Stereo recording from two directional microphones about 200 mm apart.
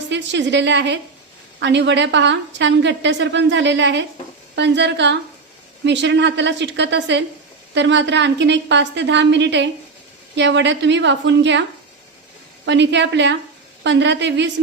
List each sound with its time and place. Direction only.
0.1 s a woman's voice: 60° right (ahead or behind)
12.6 s a woman's voice: 60° right (ahead or behind)